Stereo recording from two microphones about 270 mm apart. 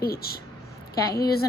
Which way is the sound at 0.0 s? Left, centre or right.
Left.